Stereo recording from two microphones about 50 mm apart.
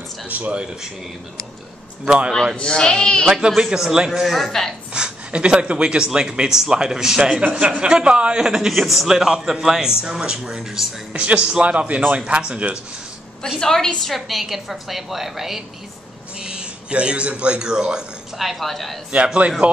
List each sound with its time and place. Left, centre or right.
0.3 s speech: right
2.0 s speech: centre
2.5 s speech: centre
3.3 s speech: centre
4.4 s speech: centre
4.9 s speech: centre
7.4 s speech: right; by 10.9 s centre
11.1 s a man's voice: right
13.6 s a woman's voice: centre
16.3 s a man's voice: right
18.4 s a woman's voice: centre
19.1 s a man's voice: right